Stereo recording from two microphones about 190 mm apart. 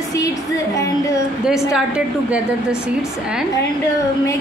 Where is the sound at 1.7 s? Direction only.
5° right (ahead or behind).